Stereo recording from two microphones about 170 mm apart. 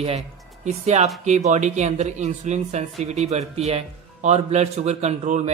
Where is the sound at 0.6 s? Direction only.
40° right (ahead or behind).